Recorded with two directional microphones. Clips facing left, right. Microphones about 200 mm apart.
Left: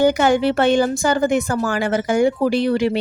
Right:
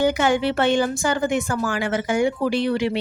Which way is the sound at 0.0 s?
40° left (ahead or behind).